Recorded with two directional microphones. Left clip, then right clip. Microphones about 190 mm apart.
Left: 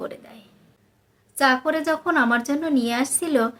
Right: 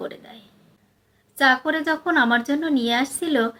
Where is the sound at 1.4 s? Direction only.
20° left (ahead or behind).